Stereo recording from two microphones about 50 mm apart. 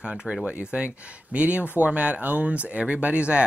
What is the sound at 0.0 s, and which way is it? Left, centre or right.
Speech, right.